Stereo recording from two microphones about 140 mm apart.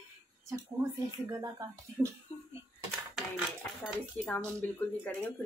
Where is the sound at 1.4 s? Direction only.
25° right (ahead or behind).